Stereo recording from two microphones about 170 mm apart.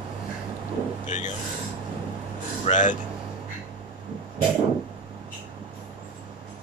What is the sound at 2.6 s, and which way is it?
Speech, 45° left (ahead or behind).